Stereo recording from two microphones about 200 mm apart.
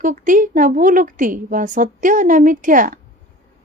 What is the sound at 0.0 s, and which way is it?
A woman's voice, 40° right (ahead or behind).